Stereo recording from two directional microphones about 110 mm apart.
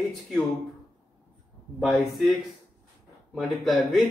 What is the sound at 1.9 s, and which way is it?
Speech, centre (ahead or behind).